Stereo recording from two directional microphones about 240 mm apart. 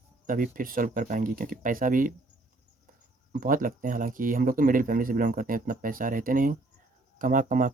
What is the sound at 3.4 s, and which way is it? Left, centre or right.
Speech, right.